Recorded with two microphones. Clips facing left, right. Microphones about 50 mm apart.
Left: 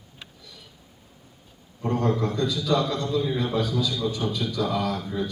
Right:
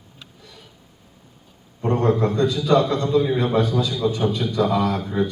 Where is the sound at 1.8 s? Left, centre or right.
Right.